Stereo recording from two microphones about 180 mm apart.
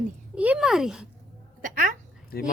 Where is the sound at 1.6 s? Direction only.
45° right (ahead or behind).